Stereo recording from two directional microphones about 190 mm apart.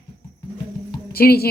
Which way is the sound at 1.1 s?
55° left (ahead or behind).